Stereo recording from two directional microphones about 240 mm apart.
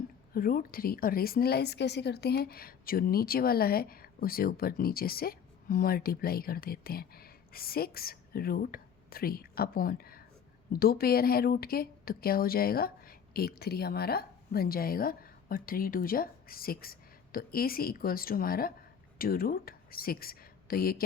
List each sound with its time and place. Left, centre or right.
0.3 s a woman's voice: left